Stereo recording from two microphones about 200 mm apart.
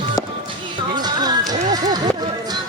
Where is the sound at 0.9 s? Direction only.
20° right (ahead or behind).